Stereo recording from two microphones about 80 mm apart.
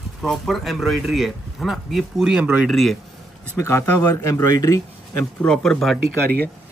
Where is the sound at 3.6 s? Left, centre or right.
Left.